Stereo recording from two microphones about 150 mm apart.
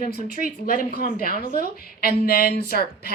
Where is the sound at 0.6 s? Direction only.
90° left.